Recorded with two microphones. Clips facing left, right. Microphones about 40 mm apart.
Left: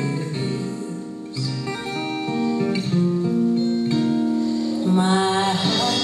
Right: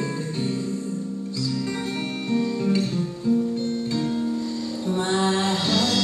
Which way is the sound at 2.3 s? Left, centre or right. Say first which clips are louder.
Even; centre.